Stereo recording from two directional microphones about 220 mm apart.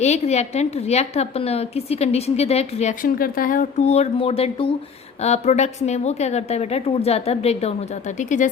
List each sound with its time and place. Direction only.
0.0 s a woman's voice: 30° left (ahead or behind)